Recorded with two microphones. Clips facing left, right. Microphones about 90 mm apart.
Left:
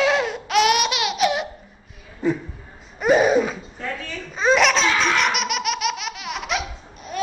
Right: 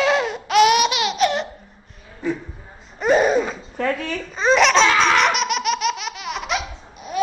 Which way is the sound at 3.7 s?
70° right (ahead or behind).